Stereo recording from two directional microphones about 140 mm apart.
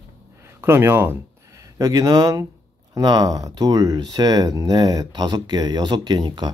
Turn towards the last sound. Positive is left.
turn(degrees=-30)  # may be behind; listen again after turning